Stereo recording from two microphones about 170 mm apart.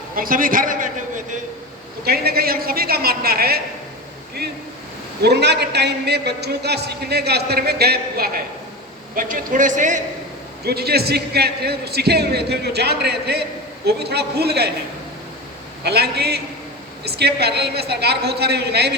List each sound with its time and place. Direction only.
0.2 s a man's voice: 55° right (ahead or behind)
2.0 s a woman's voice: 65° right (ahead or behind)
5.2 s a man's voice: 80° right
9.1 s speech: 50° right (ahead or behind)
10.7 s a man's voice: 70° right (ahead or behind)
15.8 s a man's voice: 75° right (ahead or behind)